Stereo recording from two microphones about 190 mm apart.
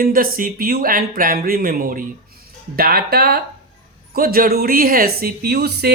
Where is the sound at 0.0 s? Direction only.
50° right (ahead or behind).